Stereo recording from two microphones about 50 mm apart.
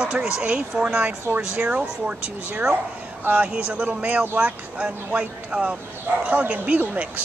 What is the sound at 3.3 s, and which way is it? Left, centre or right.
Speech, right.